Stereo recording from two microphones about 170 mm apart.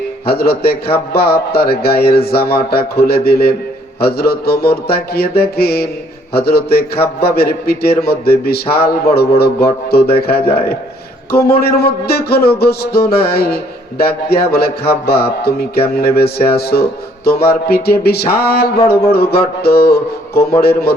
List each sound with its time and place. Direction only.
0.3 s speech: 65° left (ahead or behind)